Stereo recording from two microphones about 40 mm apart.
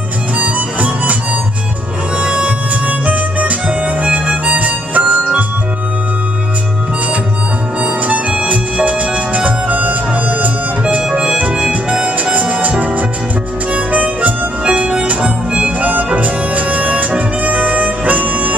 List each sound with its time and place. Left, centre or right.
0.4 s music: right
2.1 s music: right
8.5 s music: right
11.0 s music: right
13.7 s harmonica: right
14.6 s music: right
15.0 s harmonica: right
16.2 s music: right
17.1 s harmonica: right